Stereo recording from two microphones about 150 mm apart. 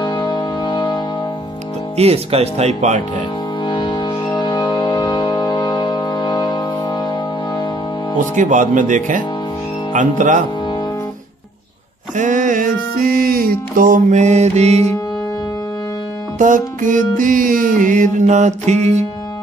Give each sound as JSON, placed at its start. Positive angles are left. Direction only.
{"t": 0.0, "sound": "music", "side_deg": 30}
{"t": 2.0, "sound": "speech", "side_deg": -40}
{"t": 3.6, "sound": "music", "side_deg": 30}
{"t": 8.4, "sound": "music", "side_deg": -60}
{"t": 12.2, "sound": "music", "side_deg": -60}
{"t": 16.3, "sound": "music", "side_deg": -60}